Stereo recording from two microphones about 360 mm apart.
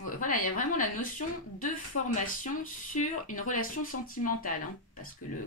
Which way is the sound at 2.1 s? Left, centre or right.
Left.